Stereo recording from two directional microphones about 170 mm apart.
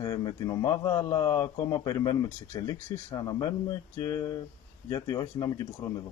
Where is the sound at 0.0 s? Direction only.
25° left (ahead or behind).